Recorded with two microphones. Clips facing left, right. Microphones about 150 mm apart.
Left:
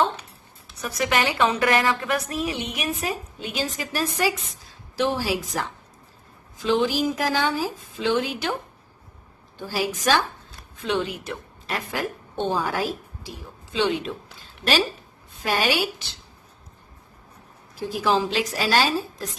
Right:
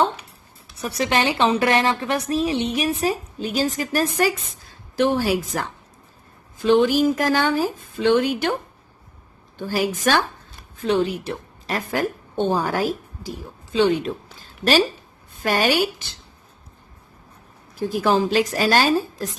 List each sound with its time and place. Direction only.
0.8 s a woman's voice: 30° right (ahead or behind); by 8.4 s 50° right (ahead or behind)
9.6 s speech: 50° right (ahead or behind)
10.8 s a woman's voice: 40° right (ahead or behind)
17.9 s speech: 50° right (ahead or behind)